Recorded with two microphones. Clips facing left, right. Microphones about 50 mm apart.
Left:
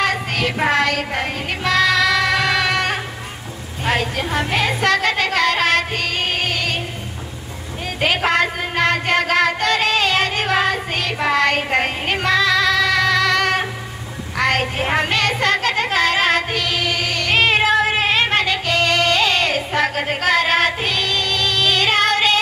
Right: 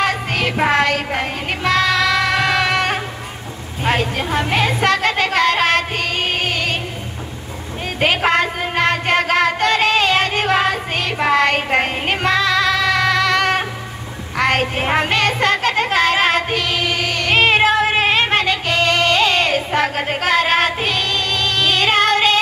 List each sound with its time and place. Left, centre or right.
0.0 s child singing: right
0.7 s a sound: right
1.6 s music: right
3.8 s a sound: right
4.3 s music: right
8.0 s music: right